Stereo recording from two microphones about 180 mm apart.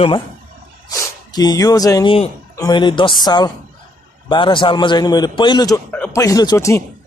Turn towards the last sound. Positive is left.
turn(degrees=15)  # may be behind; listen again after turning